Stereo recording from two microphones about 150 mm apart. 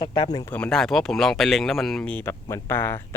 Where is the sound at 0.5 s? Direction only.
5° left (ahead or behind).